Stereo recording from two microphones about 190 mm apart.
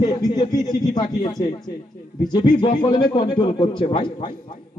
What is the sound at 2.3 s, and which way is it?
A man's voice, 25° left (ahead or behind).